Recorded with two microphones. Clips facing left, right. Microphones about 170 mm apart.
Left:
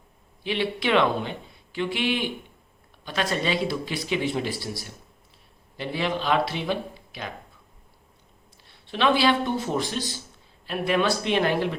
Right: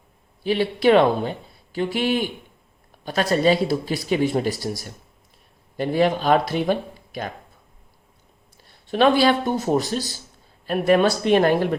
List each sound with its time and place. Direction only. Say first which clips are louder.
0.4 s speech: right 8 dB; 40° right (ahead or behind)
8.6 s speech: right 5 dB; 45° right (ahead or behind)